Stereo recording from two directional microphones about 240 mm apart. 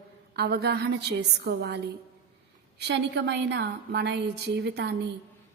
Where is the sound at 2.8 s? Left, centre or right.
Right.